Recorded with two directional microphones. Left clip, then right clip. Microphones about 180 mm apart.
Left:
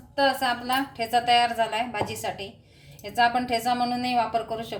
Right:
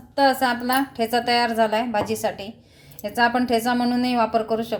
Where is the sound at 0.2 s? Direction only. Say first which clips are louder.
Right 4 dB; 30° right (ahead or behind).